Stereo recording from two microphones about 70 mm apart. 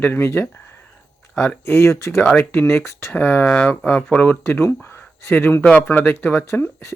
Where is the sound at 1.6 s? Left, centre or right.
Left.